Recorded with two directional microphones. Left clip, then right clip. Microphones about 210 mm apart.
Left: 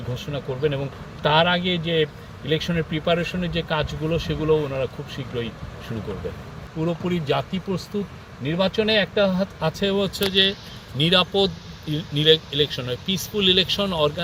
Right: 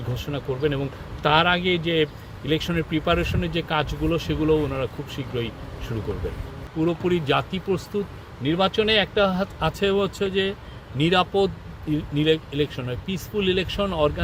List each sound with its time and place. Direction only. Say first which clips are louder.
0.3 s speech: even; centre (ahead or behind)
6.7 s speech: right 3 dB; 10° right (ahead or behind)
8.4 s speech: right 1 dB; 5° right (ahead or behind)